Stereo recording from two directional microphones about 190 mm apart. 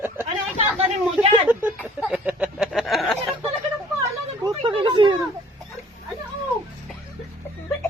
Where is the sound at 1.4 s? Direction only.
10° right (ahead or behind).